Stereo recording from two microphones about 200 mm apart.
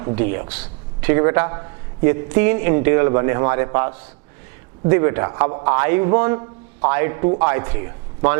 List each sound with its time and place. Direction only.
0.2 s a man's voice: 15° right (ahead or behind)